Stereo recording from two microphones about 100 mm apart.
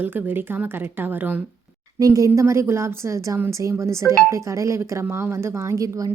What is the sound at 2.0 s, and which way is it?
A woman's voice, 35° right (ahead or behind).